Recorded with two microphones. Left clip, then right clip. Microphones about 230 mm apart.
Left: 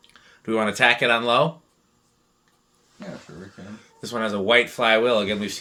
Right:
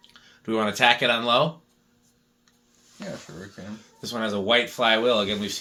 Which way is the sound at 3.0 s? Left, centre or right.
Right.